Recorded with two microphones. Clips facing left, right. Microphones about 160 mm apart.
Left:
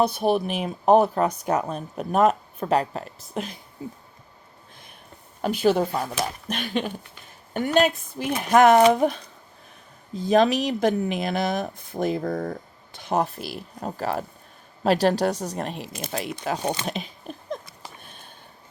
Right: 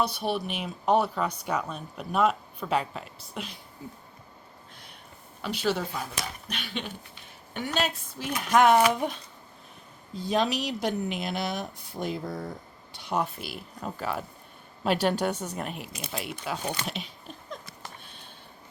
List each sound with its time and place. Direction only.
0.0 s speech: 50° left (ahead or behind)
5.4 s speech: 50° left (ahead or behind)
6.5 s speech: 45° left (ahead or behind)
10.2 s speech: 50° left (ahead or behind)
16.8 s a sound: 45° left (ahead or behind)